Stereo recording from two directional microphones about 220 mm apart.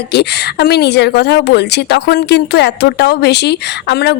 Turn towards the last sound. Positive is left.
turn(degrees=50)  # may be behind; listen again after turning